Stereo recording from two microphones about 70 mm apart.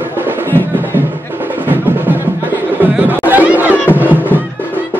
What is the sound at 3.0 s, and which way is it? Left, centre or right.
Chatter, right.